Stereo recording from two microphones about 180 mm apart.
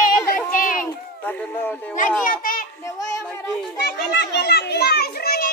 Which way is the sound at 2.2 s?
50° left (ahead or behind).